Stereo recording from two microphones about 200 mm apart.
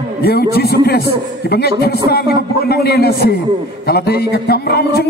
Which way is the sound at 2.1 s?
50° left (ahead or behind).